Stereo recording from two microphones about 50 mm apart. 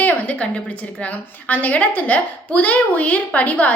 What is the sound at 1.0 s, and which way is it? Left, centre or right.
A woman's voice, left.